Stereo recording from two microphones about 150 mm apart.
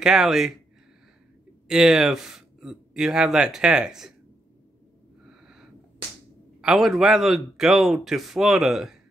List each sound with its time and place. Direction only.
0.0 s speech: 5° right (ahead or behind)
1.7 s speech: 5° right (ahead or behind)
6.6 s speech: centre (ahead or behind)